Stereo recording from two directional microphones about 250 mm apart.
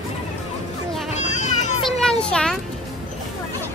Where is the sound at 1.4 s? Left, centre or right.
Left.